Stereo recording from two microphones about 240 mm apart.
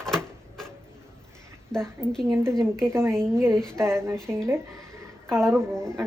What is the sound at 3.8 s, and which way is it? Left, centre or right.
Speech, centre.